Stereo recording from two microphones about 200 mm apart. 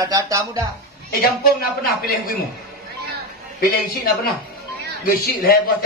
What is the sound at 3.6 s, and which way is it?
A man's voice, 50° left (ahead or behind).